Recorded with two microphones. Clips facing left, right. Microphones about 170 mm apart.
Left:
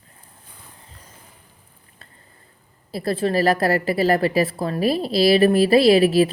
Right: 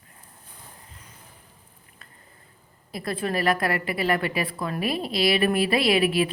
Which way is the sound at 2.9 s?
35° left (ahead or behind).